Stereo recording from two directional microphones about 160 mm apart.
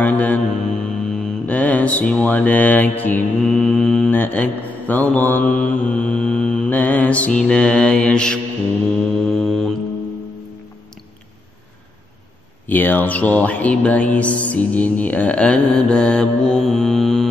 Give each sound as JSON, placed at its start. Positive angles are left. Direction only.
{"t": 0.0, "sound": "mantra", "side_deg": 10}
{"t": 12.6, "sound": "mantra", "side_deg": 10}